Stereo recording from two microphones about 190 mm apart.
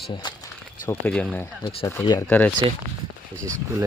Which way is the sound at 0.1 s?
25° left (ahead or behind).